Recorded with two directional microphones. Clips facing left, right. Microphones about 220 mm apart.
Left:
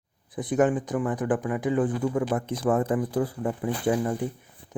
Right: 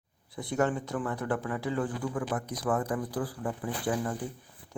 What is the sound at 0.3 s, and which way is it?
Speech, 20° left (ahead or behind).